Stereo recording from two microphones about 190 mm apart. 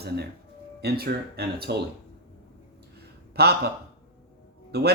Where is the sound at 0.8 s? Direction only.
55° right (ahead or behind).